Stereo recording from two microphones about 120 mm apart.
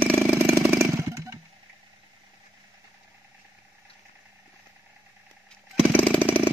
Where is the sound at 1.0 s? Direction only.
25° right (ahead or behind).